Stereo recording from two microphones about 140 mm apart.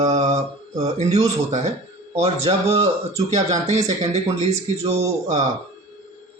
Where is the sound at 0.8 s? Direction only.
55° right (ahead or behind).